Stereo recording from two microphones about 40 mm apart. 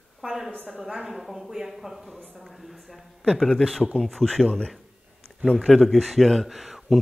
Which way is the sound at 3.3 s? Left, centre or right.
Centre.